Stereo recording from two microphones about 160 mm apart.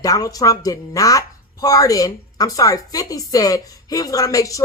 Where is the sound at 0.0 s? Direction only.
20° left (ahead or behind).